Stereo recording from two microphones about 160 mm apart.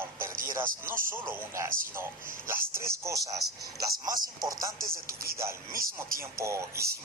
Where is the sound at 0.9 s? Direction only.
60° right (ahead or behind).